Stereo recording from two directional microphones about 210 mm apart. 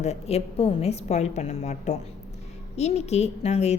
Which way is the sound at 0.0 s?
30° left (ahead or behind).